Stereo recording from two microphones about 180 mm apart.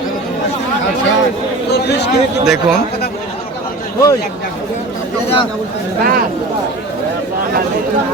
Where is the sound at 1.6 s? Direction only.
65° left (ahead or behind).